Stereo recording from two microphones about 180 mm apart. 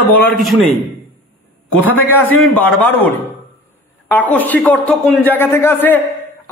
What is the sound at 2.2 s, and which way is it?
A man's voice, 10° left (ahead or behind).